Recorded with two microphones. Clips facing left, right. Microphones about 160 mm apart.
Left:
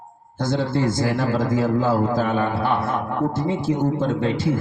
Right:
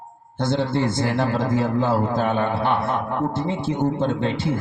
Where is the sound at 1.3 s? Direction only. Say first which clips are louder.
Left 1 dB; 60° right (ahead or behind).